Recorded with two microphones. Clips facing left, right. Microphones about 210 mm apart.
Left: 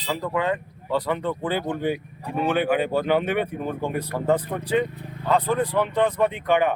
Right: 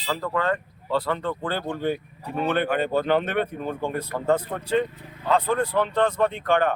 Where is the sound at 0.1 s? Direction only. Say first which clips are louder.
Left 1 dB; 15° left (ahead or behind).